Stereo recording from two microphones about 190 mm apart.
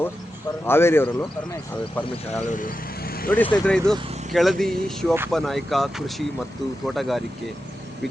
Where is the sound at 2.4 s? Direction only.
45° left (ahead or behind).